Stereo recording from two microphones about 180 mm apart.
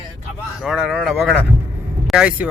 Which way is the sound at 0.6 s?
Centre (ahead or behind).